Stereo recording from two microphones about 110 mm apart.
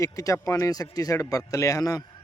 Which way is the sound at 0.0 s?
30° left (ahead or behind).